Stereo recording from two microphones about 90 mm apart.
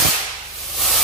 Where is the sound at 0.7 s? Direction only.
Centre (ahead or behind).